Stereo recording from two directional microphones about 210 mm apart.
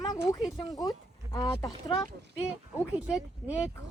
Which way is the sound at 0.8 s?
15° left (ahead or behind).